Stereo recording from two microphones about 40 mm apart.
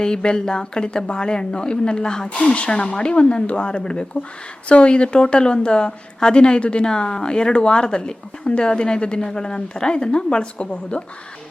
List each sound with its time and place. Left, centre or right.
0.0 s a woman's voice: left